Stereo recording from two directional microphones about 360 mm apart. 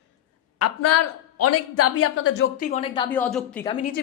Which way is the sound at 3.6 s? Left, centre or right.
Centre.